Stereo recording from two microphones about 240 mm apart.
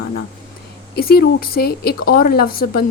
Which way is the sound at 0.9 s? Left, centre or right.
Left.